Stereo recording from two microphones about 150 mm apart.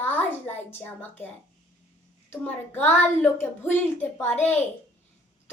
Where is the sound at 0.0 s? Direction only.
15° left (ahead or behind).